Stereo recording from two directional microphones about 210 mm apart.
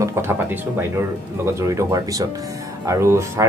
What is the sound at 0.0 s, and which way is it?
Speech, 10° right (ahead or behind).